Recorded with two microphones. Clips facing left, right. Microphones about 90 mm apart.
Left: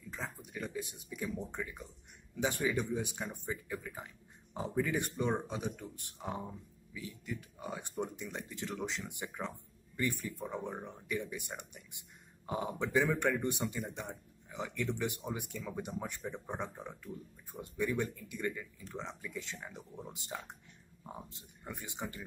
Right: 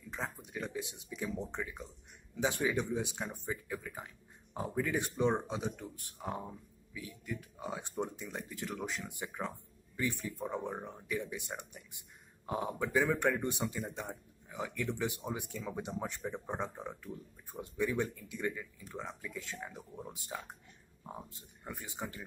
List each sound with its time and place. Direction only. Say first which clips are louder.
0.2 s speech: right 3 dB; 30° right (ahead or behind)
0.6 s speech: right 1 dB; 20° right (ahead or behind); by 4.9 s 5° right (ahead or behind)
4.9 s speech: right 2 dB; 15° right (ahead or behind)
6.1 s speech: right 1 dB; 5° right (ahead or behind)
7.6 s speech: right 1 dB; 15° right (ahead or behind)
12.4 s speech: right 1 dB; 5° right (ahead or behind)
21.6 s speech: even; 15° right (ahead or behind)